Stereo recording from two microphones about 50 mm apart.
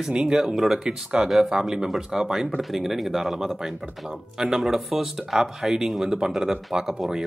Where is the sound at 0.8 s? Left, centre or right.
Centre.